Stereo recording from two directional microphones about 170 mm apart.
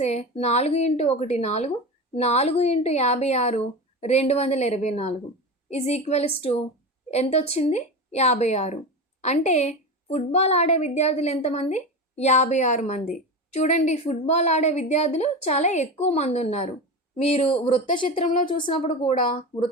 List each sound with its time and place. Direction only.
0.0 s a woman's voice: 40° left (ahead or behind)